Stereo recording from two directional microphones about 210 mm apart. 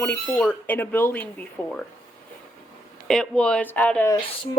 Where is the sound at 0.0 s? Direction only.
5° left (ahead or behind).